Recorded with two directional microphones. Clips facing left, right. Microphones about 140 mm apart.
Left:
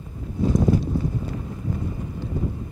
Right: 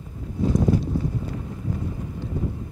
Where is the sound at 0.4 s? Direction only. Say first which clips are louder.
Left 1 dB; 25° left (ahead or behind).